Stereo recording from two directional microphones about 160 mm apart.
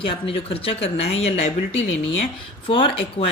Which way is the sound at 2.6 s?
35° left (ahead or behind).